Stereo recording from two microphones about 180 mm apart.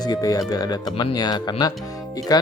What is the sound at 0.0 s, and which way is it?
Speech, 20° left (ahead or behind).